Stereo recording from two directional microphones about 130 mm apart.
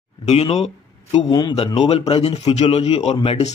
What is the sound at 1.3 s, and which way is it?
Speech, 30° left (ahead or behind).